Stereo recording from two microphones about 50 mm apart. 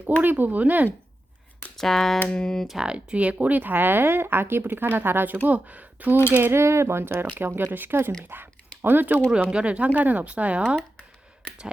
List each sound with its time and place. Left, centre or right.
0.2 s speech: right
1.7 s speech: centre
2.1 s a sound: left
2.4 s speech: centre
2.8 s speech: right
5.5 s speech: right
6.5 s speech: right
9.5 s speech: right